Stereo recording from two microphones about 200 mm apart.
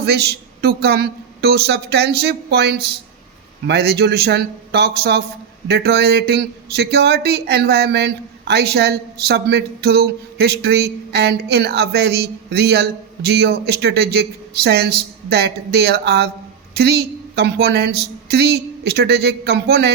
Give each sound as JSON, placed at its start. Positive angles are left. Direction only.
{"t": 0.0, "sound": "speech", "side_deg": -55}